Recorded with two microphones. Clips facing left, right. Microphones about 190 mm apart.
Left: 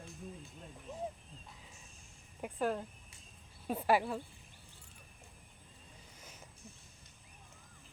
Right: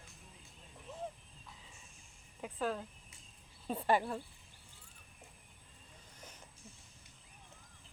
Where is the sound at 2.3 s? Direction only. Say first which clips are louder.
Left 2 dB; 15° left (ahead or behind).